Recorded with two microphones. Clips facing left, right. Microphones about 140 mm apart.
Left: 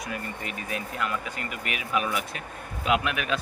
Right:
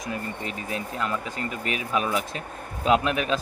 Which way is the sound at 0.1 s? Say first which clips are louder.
Right 5 dB; 30° right (ahead or behind).